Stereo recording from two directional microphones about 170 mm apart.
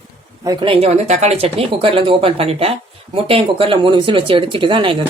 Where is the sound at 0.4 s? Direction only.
25° right (ahead or behind).